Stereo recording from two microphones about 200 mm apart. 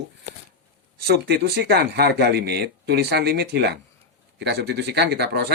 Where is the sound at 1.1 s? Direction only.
50° right (ahead or behind).